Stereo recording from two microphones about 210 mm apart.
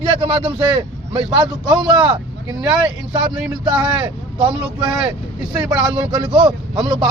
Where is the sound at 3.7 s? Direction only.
25° right (ahead or behind).